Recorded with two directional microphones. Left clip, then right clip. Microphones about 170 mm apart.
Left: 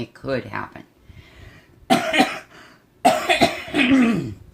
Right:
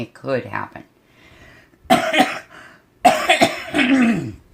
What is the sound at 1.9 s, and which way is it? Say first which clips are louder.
Cough: right 3 dB; 30° right (ahead or behind).